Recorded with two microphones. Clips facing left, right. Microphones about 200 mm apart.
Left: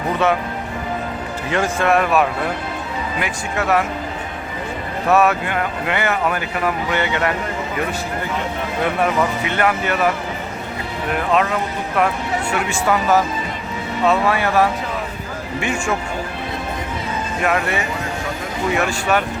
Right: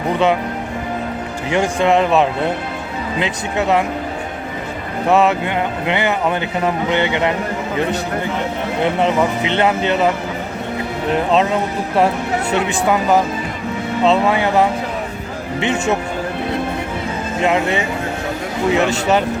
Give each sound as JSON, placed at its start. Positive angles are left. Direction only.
{"t": 1.5, "sound": "speech", "side_deg": -15}
{"t": 5.0, "sound": "speech", "side_deg": -20}
{"t": 8.8, "sound": "speech", "side_deg": -20}
{"t": 11.1, "sound": "speech", "side_deg": -25}
{"t": 17.4, "sound": "speech", "side_deg": -20}